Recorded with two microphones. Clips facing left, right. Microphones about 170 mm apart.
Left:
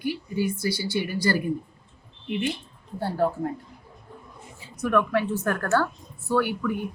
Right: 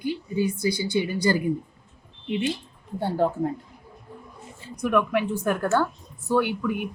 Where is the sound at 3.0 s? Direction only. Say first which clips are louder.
Right 1 dB; 20° right (ahead or behind).